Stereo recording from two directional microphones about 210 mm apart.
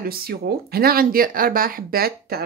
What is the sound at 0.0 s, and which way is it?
Speech, 45° right (ahead or behind).